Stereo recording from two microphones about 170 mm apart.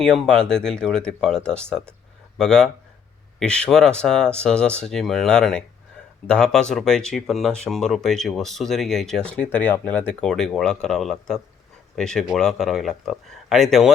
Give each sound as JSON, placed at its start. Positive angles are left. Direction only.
{"t": 0.0, "sound": "speech", "side_deg": 5}